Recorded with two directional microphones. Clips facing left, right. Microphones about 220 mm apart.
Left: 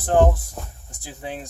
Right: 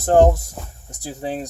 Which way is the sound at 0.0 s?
40° right (ahead or behind).